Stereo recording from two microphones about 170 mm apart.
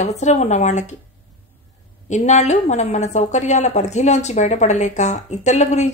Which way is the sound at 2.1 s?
45° left (ahead or behind).